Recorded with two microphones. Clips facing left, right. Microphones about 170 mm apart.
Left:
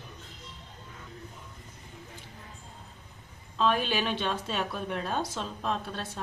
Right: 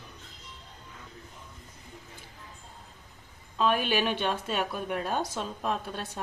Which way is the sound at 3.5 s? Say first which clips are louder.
Right 1 dB; 10° right (ahead or behind).